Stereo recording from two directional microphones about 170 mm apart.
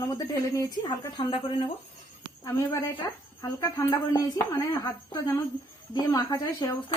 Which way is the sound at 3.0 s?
20° left (ahead or behind).